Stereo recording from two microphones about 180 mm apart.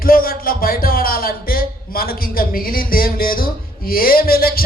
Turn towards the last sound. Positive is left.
turn(degrees=55)  # may be behind; listen again after turning